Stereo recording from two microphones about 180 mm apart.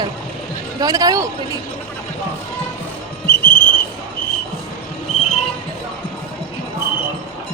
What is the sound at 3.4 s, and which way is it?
Whistle, 10° left (ahead or behind).